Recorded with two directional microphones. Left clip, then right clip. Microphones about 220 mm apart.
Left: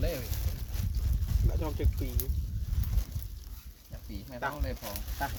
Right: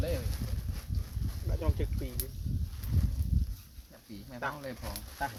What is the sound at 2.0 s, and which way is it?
Speech, 30° left (ahead or behind).